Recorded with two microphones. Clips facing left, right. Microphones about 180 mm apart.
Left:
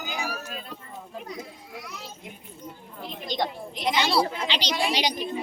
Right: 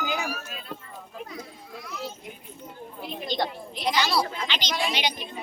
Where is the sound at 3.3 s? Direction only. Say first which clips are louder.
Left 1 dB; 20° left (ahead or behind).